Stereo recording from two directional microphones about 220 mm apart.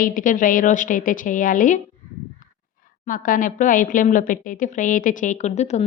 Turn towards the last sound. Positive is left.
turn(degrees=30)  # may be behind; listen again after turning